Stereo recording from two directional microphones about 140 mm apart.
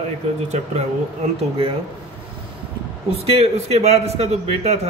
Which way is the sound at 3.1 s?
45° right (ahead or behind).